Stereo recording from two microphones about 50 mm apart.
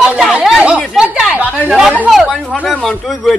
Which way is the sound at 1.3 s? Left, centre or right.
Centre.